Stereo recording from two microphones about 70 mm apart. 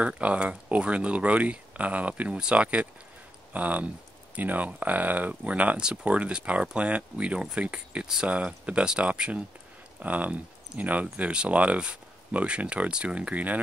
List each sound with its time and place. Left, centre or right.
0.0 s speech: centre